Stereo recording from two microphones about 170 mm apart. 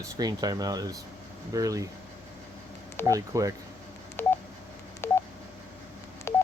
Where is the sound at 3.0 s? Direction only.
20° right (ahead or behind).